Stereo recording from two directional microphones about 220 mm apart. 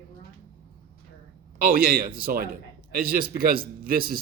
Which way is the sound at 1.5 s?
40° right (ahead or behind).